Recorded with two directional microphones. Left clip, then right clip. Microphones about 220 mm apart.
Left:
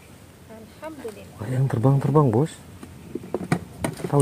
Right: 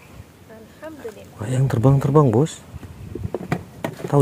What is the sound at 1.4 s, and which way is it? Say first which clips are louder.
Speech: right 4 dB; 10° right (ahead or behind).